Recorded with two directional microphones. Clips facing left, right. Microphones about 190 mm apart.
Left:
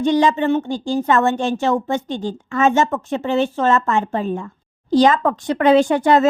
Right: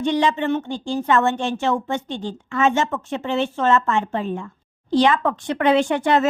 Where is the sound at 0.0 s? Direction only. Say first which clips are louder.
Left 4 dB; 40° left (ahead or behind).